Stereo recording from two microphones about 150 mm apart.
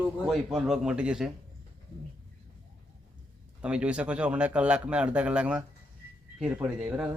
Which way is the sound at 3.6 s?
10° right (ahead or behind).